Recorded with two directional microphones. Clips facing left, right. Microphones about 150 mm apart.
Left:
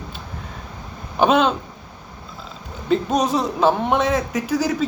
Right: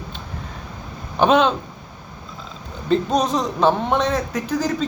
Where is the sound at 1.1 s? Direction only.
5° left (ahead or behind).